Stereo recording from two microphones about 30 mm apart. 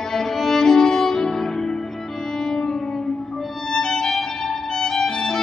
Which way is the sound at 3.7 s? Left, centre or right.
Centre.